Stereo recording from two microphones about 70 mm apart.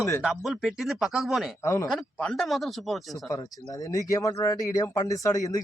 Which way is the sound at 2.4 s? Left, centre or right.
Centre.